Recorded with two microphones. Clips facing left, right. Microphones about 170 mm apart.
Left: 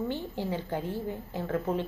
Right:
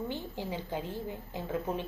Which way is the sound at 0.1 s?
15° right (ahead or behind).